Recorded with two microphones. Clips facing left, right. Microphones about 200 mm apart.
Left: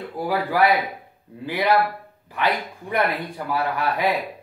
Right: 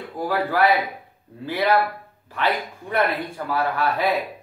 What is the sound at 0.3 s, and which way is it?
Speech, 15° left (ahead or behind).